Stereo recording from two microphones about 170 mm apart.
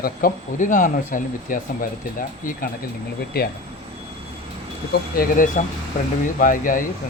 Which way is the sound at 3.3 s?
65° left (ahead or behind).